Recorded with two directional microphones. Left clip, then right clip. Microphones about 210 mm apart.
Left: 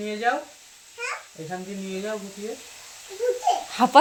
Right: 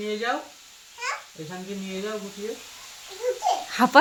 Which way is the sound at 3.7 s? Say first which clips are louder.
Left 1 dB; 15° right (ahead or behind).